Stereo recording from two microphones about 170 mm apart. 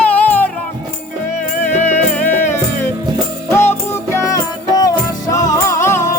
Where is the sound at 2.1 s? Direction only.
10° left (ahead or behind).